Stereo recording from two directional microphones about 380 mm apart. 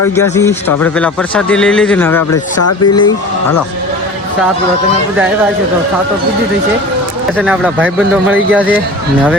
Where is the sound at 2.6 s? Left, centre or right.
Left.